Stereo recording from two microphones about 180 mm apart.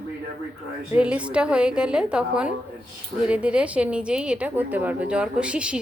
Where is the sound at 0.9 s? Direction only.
5° right (ahead or behind).